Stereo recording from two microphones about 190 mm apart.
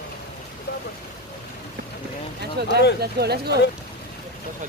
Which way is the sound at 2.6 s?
60° right (ahead or behind).